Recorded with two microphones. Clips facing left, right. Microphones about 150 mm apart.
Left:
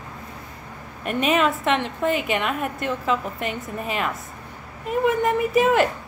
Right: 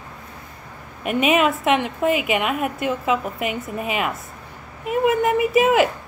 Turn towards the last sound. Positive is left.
turn(degrees=-5)  # may be behind; listen again after turning